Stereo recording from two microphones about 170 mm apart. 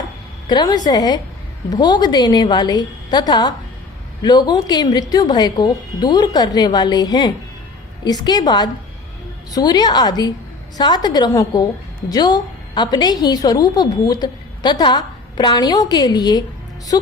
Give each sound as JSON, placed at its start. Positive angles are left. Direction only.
{"t": 0.4, "sound": "a woman's voice", "side_deg": 25}